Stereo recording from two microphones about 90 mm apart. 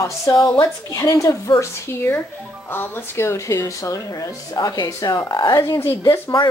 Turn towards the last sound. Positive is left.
turn(degrees=30)  # may be behind; listen again after turning